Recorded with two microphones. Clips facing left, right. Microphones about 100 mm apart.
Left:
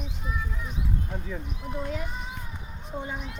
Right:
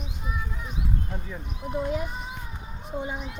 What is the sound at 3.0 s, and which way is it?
Speech, 10° right (ahead or behind).